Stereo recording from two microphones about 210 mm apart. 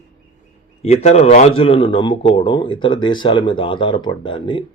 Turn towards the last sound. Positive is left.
turn(degrees=25)  # may be behind; listen again after turning